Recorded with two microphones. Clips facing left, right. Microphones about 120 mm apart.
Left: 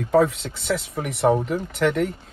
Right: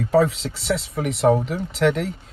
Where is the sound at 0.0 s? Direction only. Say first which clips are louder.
Even; centre (ahead or behind).